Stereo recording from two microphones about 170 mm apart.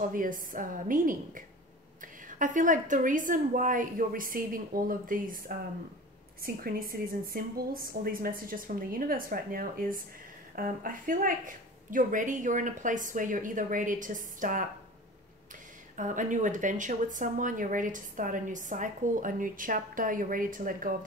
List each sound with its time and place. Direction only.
0.1 s speech: 50° right (ahead or behind)
6.4 s a woman's voice: 60° right (ahead or behind)
16.0 s speech: 50° right (ahead or behind)